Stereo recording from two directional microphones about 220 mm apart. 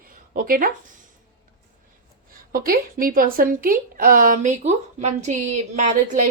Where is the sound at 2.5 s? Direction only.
40° right (ahead or behind).